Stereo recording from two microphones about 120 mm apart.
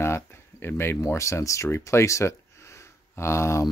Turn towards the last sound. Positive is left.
turn(degrees=20)  # may be behind; listen again after turning